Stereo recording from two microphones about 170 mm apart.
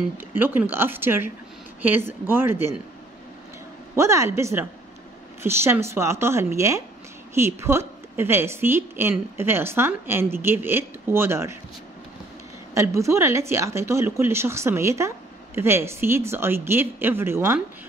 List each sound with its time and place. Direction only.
0.4 s speech: 10° right (ahead or behind)
3.9 s speech: 15° right (ahead or behind)
12.7 s speech: 15° right (ahead or behind)